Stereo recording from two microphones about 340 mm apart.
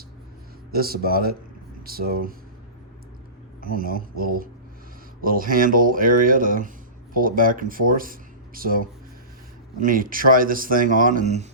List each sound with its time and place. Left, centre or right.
0.7 s speech: right
3.6 s speech: right